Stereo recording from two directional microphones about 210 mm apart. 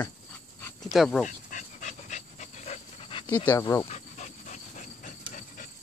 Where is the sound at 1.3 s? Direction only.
40° left (ahead or behind).